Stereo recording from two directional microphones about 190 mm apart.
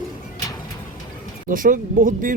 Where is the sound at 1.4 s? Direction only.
45° right (ahead or behind).